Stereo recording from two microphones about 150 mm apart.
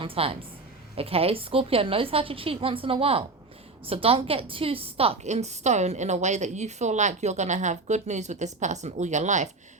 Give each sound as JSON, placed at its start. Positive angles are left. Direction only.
{"t": 0.0, "sound": "a woman's voice", "side_deg": -40}